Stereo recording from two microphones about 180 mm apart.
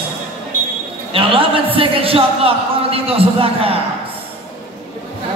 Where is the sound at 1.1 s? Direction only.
30° right (ahead or behind).